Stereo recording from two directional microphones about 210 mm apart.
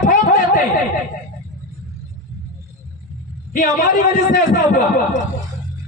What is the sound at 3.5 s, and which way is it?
A man's voice, 40° left (ahead or behind).